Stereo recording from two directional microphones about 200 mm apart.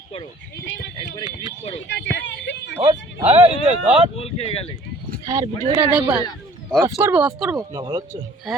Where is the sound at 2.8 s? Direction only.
30° right (ahead or behind).